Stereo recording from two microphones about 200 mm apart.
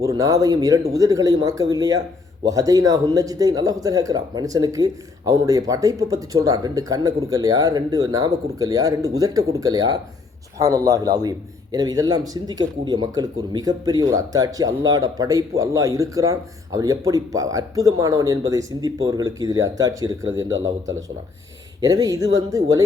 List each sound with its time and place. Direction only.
0.2 s a man's voice: 15° right (ahead or behind)
21.8 s a man's voice: 20° right (ahead or behind)